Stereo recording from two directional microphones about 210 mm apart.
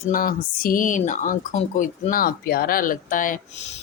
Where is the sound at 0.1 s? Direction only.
45° left (ahead or behind).